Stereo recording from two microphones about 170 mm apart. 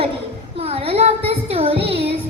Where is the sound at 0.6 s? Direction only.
35° right (ahead or behind).